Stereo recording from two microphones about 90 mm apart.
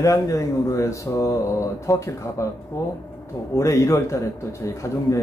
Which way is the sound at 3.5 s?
35° left (ahead or behind).